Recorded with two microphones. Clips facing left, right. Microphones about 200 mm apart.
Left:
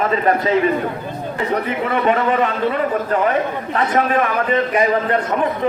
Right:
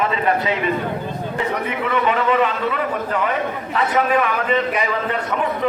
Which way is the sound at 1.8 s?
40° left (ahead or behind).